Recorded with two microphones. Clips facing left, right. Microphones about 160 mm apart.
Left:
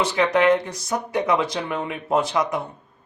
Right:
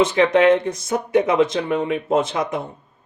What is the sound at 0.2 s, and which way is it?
Speech, 25° right (ahead or behind).